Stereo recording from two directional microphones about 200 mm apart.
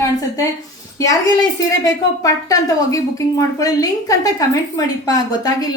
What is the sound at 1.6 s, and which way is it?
A woman's voice, 15° left (ahead or behind).